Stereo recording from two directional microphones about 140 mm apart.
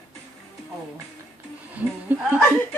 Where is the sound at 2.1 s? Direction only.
10° right (ahead or behind).